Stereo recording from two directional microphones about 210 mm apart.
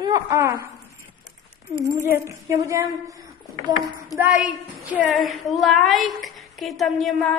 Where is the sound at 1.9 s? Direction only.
15° right (ahead or behind).